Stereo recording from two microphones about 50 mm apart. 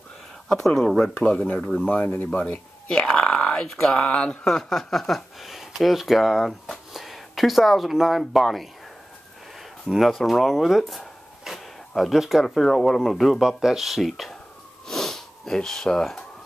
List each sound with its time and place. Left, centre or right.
0.5 s speech: centre
1.2 s speech: left
1.9 s speech: left
2.3 s speech: left; by 8.6 s centre
9.6 s a sound: centre
11.9 s speech: centre
12.5 s speech: centre
14.9 s sniff: centre